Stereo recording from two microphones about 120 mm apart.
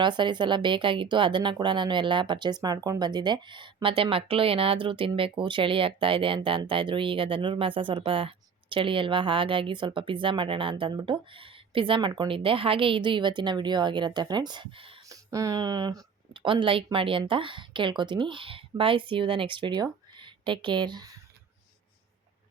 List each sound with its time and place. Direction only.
0.0 s a woman's voice: 40° right (ahead or behind)
15.1 s speech: 30° right (ahead or behind)
16.3 s a woman's voice: 45° right (ahead or behind)